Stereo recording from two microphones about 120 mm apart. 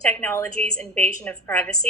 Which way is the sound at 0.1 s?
20° left (ahead or behind).